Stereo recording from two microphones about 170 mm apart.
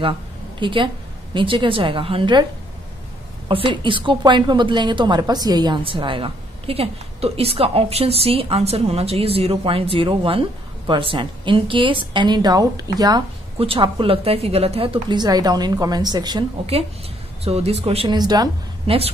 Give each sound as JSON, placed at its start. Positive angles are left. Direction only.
{"t": 0.6, "sound": "a woman's voice", "side_deg": -30}
{"t": 3.4, "sound": "a woman's voice", "side_deg": -30}
{"t": 17.5, "sound": "a woman's voice", "side_deg": -35}